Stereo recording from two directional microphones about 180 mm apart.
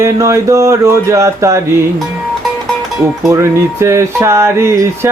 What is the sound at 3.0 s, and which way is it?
Cowbell, 15° right (ahead or behind).